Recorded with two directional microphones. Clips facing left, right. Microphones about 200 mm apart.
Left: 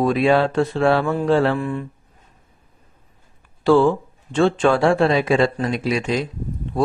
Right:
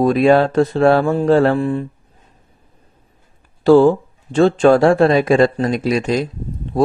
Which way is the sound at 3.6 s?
40° right (ahead or behind).